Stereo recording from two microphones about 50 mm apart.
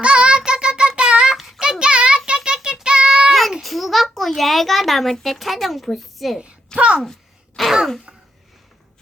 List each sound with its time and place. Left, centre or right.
0.0 s child singing: right
1.4 s child singing: centre
1.8 s child singing: centre
3.6 s a sound: centre
6.7 s a child's voice: right
7.0 s a sound: centre